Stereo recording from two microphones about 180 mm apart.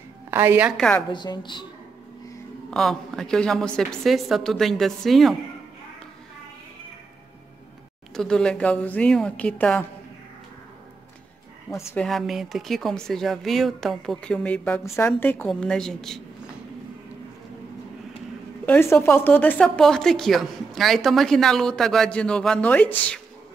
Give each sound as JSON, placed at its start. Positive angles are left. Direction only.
{"t": 0.3, "sound": "a woman's voice", "side_deg": -10}
{"t": 0.7, "sound": "a woman's voice", "side_deg": 5}
{"t": 1.1, "sound": "a woman's voice", "side_deg": 25}
{"t": 2.7, "sound": "a woman's voice", "side_deg": 5}
{"t": 8.1, "sound": "a woman's voice", "side_deg": 5}
{"t": 11.7, "sound": "a woman's voice", "side_deg": 15}
{"t": 12.0, "sound": "a woman's voice", "side_deg": 0}
{"t": 18.7, "sound": "a woman's voice", "side_deg": 15}